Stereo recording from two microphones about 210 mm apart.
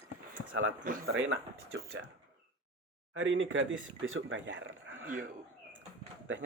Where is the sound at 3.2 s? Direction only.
60° right (ahead or behind).